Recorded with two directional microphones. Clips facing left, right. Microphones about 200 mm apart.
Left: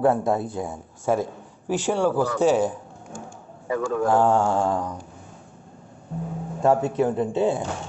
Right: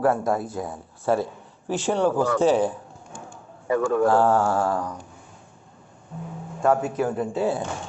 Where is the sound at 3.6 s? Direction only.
60° right (ahead or behind).